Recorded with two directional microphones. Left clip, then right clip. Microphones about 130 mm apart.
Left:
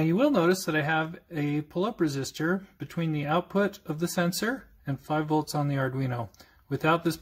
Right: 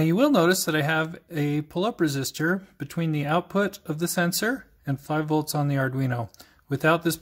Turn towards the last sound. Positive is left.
turn(degrees=-20)  # may be behind; listen again after turning